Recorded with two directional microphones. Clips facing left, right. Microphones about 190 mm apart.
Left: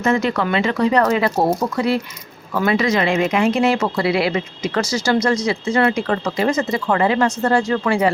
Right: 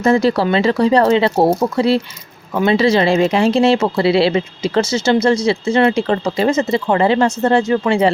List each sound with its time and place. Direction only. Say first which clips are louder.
0.0 s speech: right 5 dB; 35° right (ahead or behind)